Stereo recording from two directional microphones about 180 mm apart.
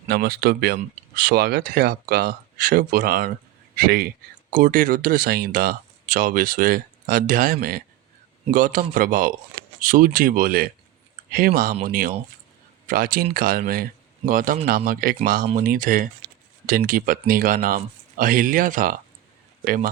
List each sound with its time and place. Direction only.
0.1 s speech: 60° right (ahead or behind)